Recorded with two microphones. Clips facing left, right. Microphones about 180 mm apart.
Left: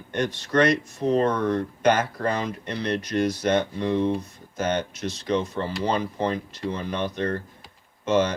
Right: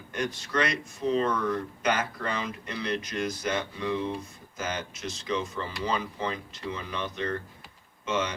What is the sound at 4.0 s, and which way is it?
Speech, 65° left (ahead or behind).